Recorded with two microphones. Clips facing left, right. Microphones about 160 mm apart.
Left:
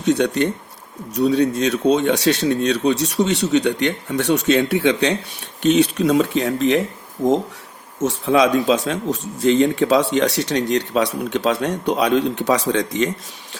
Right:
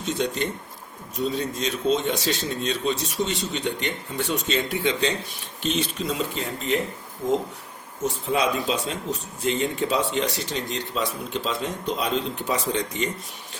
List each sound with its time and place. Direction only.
0.0 s speech: 70° left (ahead or behind); by 6.8 s 90° left
8.0 s speech: 90° left